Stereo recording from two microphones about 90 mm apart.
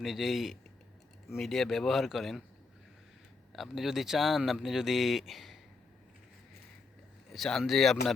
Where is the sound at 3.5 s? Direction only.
Centre (ahead or behind).